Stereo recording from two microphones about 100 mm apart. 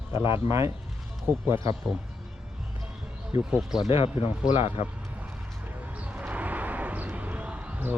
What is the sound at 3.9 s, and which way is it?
Speech, 80° left.